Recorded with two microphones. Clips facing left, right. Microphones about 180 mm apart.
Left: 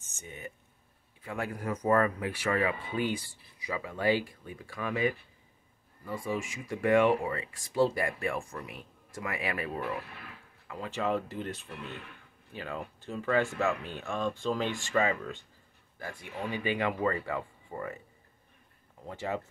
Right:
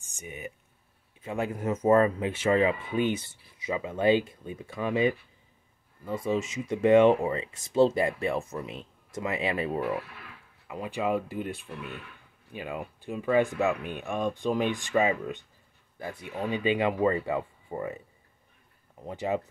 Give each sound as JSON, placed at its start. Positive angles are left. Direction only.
{"t": 0.0, "sound": "a sound", "side_deg": -15}
{"t": 1.2, "sound": "speech", "side_deg": -20}
{"t": 19.0, "sound": "speech", "side_deg": -15}